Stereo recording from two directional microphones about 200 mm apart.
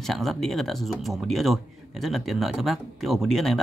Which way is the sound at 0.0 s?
Centre (ahead or behind).